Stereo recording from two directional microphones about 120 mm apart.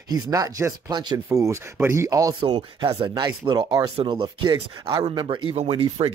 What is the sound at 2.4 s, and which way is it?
Speech, 45° right (ahead or behind).